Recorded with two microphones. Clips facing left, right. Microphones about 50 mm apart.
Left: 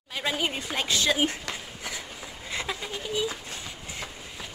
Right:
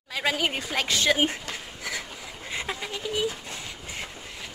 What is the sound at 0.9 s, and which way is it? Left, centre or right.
Speech, right.